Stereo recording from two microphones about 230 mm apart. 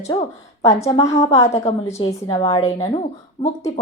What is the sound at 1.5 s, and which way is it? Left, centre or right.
A woman's voice, left.